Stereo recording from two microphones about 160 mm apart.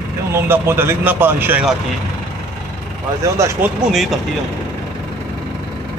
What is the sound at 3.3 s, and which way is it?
Speech, 15° right (ahead or behind).